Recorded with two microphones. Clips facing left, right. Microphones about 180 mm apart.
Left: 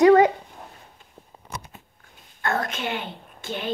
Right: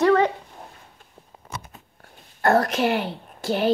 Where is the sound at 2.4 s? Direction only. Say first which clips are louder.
Right 8 dB; 65° right (ahead or behind).